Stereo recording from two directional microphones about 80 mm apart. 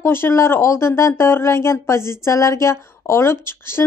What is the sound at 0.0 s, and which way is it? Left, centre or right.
A woman's voice, left.